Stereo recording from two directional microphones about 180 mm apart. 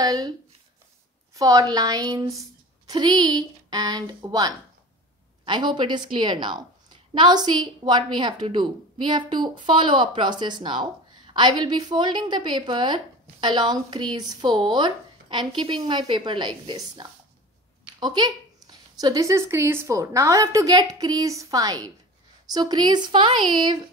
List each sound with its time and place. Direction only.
0.0 s speech: 20° right (ahead or behind)
1.3 s a woman's voice: 20° right (ahead or behind)